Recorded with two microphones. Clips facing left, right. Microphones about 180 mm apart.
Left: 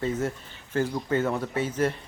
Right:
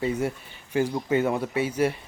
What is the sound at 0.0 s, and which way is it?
Speech, 10° right (ahead or behind).